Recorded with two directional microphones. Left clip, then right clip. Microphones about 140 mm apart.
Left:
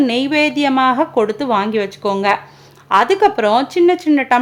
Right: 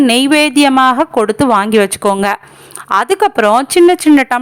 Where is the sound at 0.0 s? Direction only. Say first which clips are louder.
Right 5 dB; 40° right (ahead or behind).